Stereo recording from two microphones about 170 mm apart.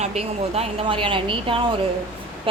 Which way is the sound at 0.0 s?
40° right (ahead or behind).